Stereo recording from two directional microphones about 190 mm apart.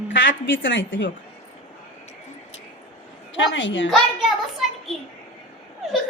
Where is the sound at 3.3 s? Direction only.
75° left (ahead or behind).